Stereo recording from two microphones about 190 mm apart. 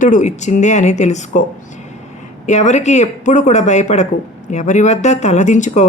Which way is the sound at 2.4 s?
40° left (ahead or behind).